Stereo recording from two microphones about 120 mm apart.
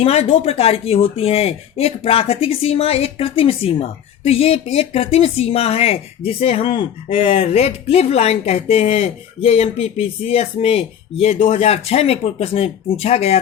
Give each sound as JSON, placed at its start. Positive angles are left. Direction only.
{"t": 0.0, "sound": "speech", "side_deg": 55}